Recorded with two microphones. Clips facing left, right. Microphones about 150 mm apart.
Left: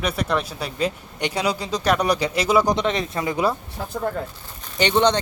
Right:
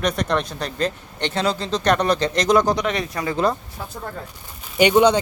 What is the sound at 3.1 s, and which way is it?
Speech, 20° left (ahead or behind).